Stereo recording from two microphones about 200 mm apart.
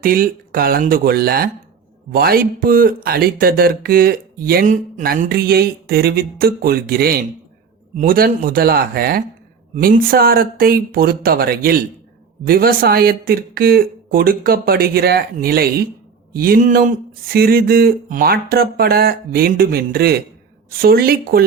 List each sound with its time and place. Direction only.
0.0 s speech: 45° right (ahead or behind)